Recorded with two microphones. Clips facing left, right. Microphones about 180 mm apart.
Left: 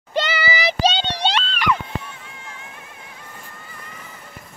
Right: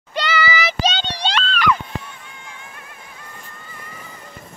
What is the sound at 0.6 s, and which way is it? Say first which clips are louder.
Child singing: left 2 dB; 30° left (ahead or behind).